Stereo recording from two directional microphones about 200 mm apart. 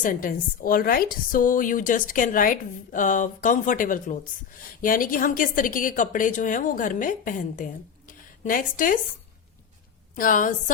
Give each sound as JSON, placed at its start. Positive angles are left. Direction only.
{"t": 0.0, "sound": "a woman's voice", "side_deg": 45}
{"t": 10.2, "sound": "a woman's voice", "side_deg": 40}